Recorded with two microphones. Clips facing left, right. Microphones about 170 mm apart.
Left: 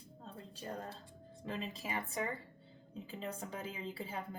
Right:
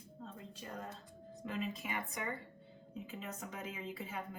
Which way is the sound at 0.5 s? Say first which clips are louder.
Left 5 dB; 30° left (ahead or behind).